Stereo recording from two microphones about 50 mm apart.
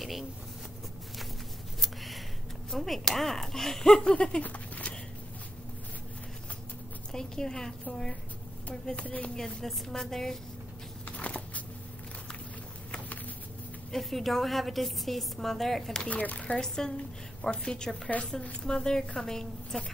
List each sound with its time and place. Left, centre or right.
0.0 s vehicle: centre
1.8 s a sound: centre
2.7 s speech: centre
4.4 s a sound: left
7.1 s speech: centre
8.9 s speech: left
9.3 s a woman's voice: centre
11.1 s a sound: left
13.9 s a woman's voice: centre
16.1 s speech: left
16.5 s speech: centre